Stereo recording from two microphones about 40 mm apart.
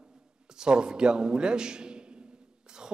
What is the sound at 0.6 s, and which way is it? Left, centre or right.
A man's voice, centre.